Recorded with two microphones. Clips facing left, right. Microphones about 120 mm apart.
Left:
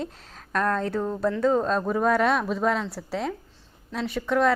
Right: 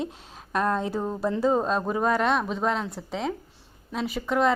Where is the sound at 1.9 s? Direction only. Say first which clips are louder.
Left 2 dB; centre (ahead or behind).